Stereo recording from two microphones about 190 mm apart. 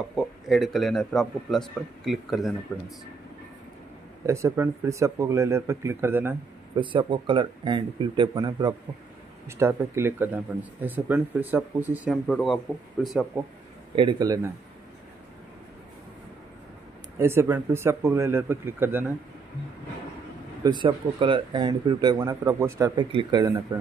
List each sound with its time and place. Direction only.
0.1 s a man's voice: centre (ahead or behind)
4.3 s speech: 15° right (ahead or behind)
6.8 s speech: 25° right (ahead or behind); by 12.2 s 10° right (ahead or behind)
12.3 s a man's voice: centre (ahead or behind)
13.9 s speech: 20° right (ahead or behind)
17.2 s speech: 15° right (ahead or behind)
20.6 s speech: 25° right (ahead or behind)